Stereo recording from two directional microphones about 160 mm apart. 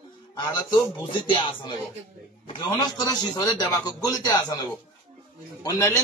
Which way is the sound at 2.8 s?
25° left (ahead or behind).